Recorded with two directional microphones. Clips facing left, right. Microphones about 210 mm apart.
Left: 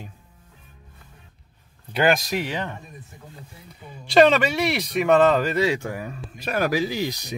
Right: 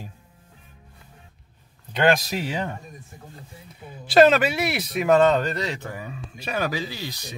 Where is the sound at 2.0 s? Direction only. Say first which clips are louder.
Even; 5° left (ahead or behind).